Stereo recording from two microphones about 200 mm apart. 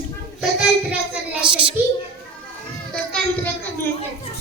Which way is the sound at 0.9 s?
5° right (ahead or behind).